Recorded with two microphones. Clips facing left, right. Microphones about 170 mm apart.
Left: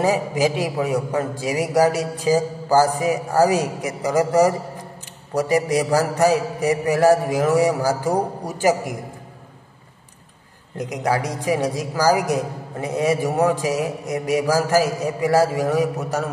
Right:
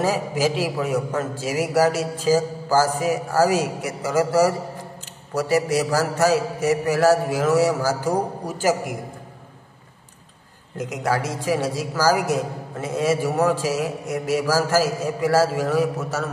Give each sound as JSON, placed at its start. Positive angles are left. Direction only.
{"t": 0.0, "sound": "a man's voice", "side_deg": 15}
{"t": 11.0, "sound": "a man's voice", "side_deg": 15}